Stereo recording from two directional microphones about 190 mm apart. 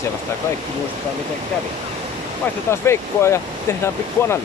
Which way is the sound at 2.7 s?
15° left (ahead or behind).